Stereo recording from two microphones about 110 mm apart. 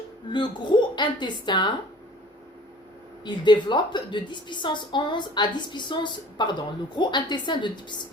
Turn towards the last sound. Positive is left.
turn(degrees=45)  # may be behind; listen again after turning